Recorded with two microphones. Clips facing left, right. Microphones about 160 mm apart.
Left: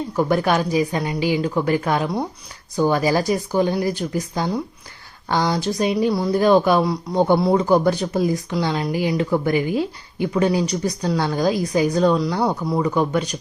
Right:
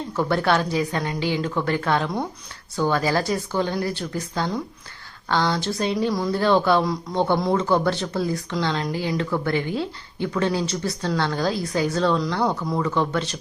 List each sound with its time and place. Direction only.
0.2 s speech: 15° left (ahead or behind)